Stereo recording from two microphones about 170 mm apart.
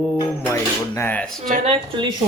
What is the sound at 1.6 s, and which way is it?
Speech, 35° right (ahead or behind).